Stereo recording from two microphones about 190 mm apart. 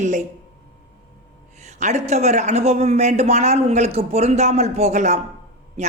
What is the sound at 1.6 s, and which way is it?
Speech, 35° right (ahead or behind).